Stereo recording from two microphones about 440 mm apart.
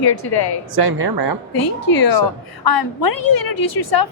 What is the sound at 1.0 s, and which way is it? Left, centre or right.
Speech, right.